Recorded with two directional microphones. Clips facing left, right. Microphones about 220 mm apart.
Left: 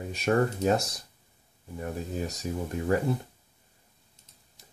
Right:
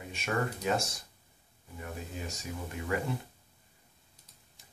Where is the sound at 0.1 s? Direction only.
40° left (ahead or behind).